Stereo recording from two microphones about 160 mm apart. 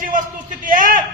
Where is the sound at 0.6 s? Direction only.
60° right (ahead or behind).